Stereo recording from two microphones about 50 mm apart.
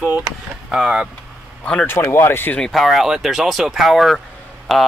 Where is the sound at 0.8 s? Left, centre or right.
Centre.